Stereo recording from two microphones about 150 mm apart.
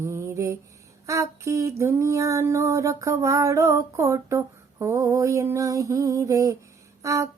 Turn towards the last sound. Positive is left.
turn(degrees=-20)  # may be behind; listen again after turning